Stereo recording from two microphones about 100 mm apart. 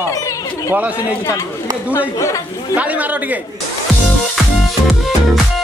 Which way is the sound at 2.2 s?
30° left (ahead or behind).